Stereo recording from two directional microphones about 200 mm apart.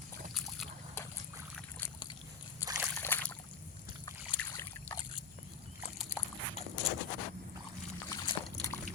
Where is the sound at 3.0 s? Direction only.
10° left (ahead or behind).